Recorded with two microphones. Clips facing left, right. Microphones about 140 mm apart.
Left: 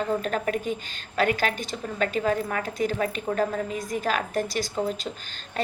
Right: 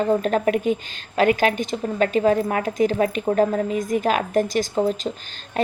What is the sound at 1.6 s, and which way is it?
A woman's voice, 45° right (ahead or behind).